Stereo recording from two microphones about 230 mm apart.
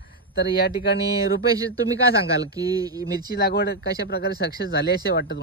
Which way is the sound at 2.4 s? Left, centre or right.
Centre.